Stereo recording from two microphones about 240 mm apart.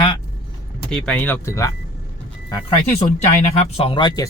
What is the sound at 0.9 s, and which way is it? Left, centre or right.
Speech, centre.